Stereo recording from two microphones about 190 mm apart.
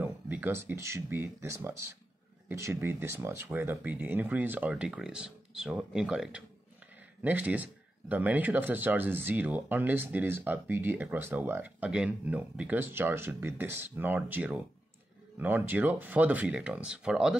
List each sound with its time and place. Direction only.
0.0 s speech: 10° right (ahead or behind)